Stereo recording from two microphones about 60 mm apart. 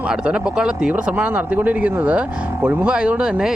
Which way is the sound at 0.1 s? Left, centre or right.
Centre.